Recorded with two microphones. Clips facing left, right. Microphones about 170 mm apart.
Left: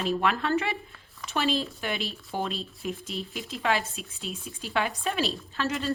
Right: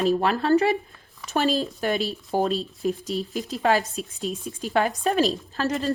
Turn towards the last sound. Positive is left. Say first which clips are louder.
# right 4 dB
turn(degrees=-40)  # may be behind; listen again after turning